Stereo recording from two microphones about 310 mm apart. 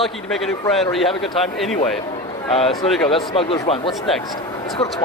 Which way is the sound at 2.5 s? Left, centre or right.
Centre.